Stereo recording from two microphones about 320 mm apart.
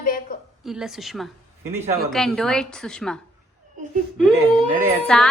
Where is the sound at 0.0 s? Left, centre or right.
Left.